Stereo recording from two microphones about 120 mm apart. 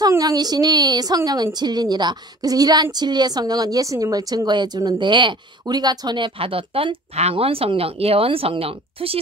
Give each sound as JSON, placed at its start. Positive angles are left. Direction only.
{"t": 0.2, "sound": "a woman's voice", "side_deg": -35}